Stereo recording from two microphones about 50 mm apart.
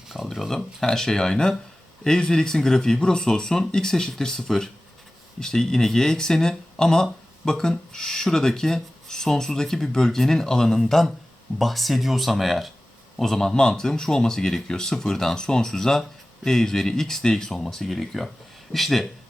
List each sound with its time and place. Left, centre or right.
0.3 s speech: centre
13.5 s speech: centre